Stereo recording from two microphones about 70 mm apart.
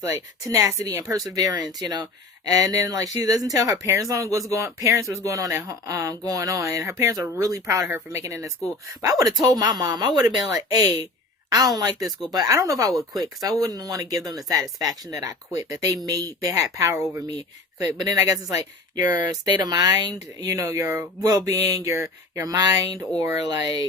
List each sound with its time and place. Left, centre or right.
0.0 s speech: right
7.9 s speech: right
8.2 s speech: right
10.5 s speech: right
13.0 s speech: right
16.0 s speech: right
21.2 s speech: right
21.8 s speech: right